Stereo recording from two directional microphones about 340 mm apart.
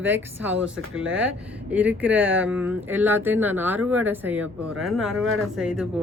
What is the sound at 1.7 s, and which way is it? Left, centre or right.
Speech, centre.